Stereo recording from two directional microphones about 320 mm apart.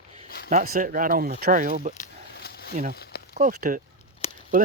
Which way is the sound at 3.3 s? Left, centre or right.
Right.